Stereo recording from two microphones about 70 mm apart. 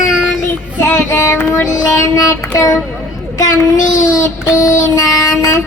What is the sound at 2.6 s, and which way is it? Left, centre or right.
Speech, left.